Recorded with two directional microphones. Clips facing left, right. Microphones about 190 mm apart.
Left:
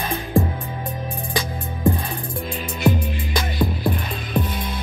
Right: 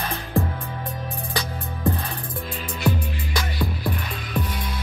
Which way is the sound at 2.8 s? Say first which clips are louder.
Left 4 dB; 25° left (ahead or behind).